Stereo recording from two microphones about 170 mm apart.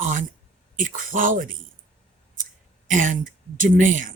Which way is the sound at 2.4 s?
50° right (ahead or behind).